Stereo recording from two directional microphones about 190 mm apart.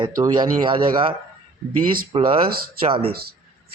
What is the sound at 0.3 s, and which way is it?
Speech, 25° right (ahead or behind).